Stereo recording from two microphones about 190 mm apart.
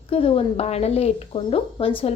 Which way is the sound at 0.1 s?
30° left (ahead or behind).